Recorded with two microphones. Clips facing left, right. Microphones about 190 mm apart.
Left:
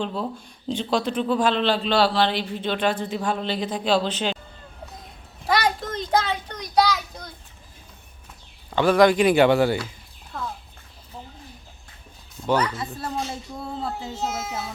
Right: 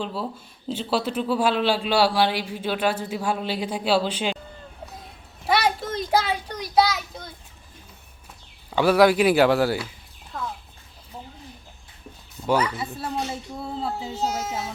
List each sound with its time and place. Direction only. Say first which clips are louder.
0.0 s a man's voice: left 2 dB; 5° right (ahead or behind)
5.5 s child singing: even; 5° right (ahead or behind)
8.7 s speech: even; 5° right (ahead or behind)
10.3 s a sound: even; centre (ahead or behind)
12.5 s a man's voice: even; 10° right (ahead or behind)
14.2 s speech: right 3 dB; 35° right (ahead or behind)